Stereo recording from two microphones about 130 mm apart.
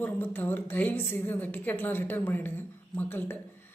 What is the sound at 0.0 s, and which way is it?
A woman's voice, 15° left (ahead or behind).